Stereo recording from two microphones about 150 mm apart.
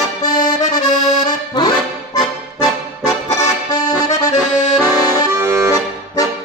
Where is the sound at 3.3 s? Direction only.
20° left (ahead or behind).